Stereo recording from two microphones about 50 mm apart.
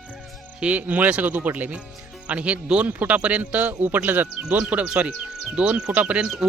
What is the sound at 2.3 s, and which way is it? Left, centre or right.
Speech, right.